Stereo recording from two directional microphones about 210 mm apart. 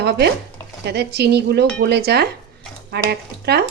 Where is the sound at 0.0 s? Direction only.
50° right (ahead or behind).